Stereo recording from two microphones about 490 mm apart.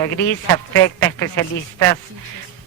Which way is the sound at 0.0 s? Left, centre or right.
Centre.